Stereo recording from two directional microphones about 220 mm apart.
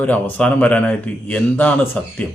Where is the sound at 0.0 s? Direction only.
5° left (ahead or behind).